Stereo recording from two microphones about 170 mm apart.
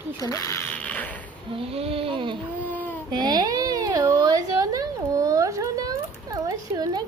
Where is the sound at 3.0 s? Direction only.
25° right (ahead or behind).